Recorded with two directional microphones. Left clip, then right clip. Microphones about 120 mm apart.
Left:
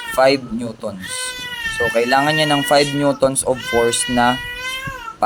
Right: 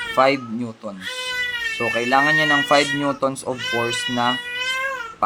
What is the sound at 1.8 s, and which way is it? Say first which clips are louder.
Speech: left 3 dB; 50° left (ahead or behind).